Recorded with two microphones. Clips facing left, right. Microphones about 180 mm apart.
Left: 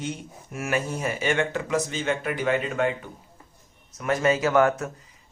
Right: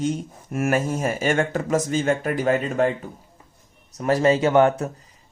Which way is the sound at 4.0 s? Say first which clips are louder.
Right 4 dB; 35° right (ahead or behind).